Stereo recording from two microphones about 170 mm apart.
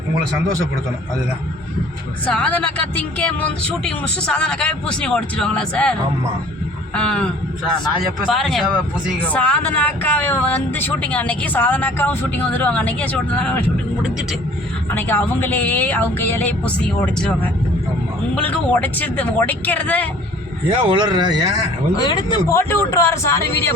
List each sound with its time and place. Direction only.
2.2 s speech: 5° left (ahead or behind)
8.3 s speech: centre (ahead or behind)
14.8 s speech: 10° left (ahead or behind)
20.7 s speech: 30° right (ahead or behind)
21.9 s speech: 25° left (ahead or behind)